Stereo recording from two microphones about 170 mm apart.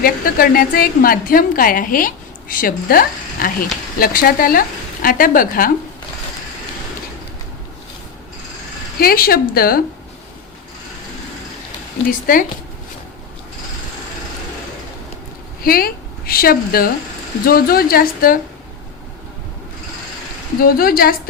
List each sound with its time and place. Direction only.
0.0 s a woman's voice: 60° left (ahead or behind)
9.0 s a woman's voice: 60° left (ahead or behind)
12.0 s a woman's voice: 55° left (ahead or behind)
15.6 s a woman's voice: 60° left (ahead or behind)
20.6 s a woman's voice: 60° left (ahead or behind)